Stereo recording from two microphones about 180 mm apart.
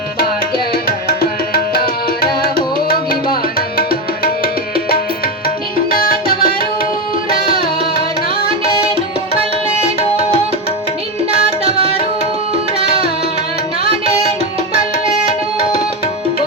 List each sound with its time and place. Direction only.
2.2 s tabla: 55° left (ahead or behind)
3.8 s music: 55° left (ahead or behind)
5.9 s music: 55° left (ahead or behind)